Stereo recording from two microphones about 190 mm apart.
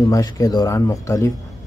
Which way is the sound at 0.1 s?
20° left (ahead or behind).